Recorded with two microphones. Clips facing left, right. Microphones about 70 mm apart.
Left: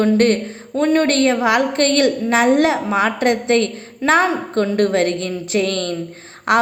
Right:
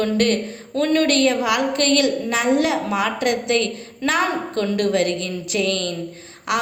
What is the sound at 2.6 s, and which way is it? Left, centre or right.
A woman's voice, left.